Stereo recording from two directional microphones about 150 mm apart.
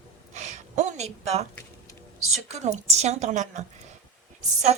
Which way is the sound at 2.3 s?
50° right (ahead or behind).